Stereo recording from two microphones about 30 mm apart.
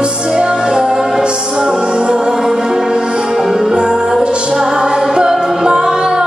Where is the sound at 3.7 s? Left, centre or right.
Right.